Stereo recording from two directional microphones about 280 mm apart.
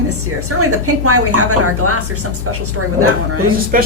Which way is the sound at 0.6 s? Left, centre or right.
Right.